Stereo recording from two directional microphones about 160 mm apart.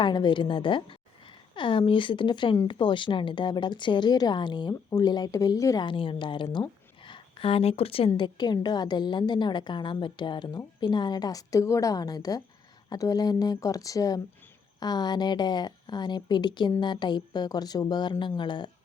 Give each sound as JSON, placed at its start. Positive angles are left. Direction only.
{"t": 0.0, "sound": "a woman's voice", "side_deg": 30}